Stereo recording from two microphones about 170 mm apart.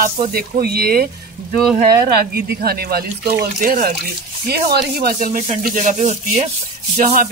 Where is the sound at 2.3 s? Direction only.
65° right (ahead or behind).